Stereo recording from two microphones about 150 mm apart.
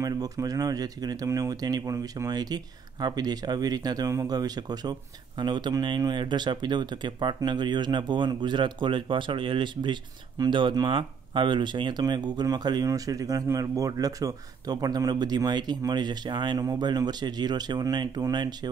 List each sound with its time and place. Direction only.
0.0 s speech: 25° right (ahead or behind)